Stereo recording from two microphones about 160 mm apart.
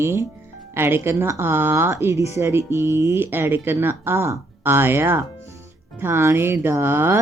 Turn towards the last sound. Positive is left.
turn(degrees=-15)  # may be behind; listen again after turning